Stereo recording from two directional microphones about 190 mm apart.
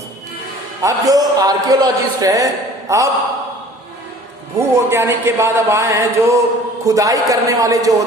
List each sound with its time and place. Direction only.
0.8 s speech: 15° right (ahead or behind)
4.5 s speech: 15° right (ahead or behind)